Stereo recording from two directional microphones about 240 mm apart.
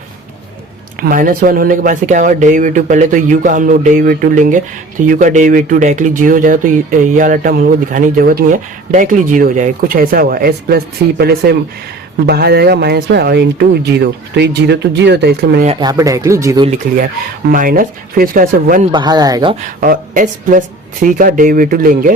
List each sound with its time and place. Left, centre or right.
0.9 s speech: right
15.6 s speech: right
17.5 s speech: right
18.9 s speech: centre
19.6 s speech: right